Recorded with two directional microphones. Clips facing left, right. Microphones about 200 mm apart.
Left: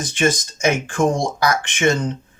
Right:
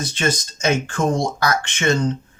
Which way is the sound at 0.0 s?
15° left (ahead or behind).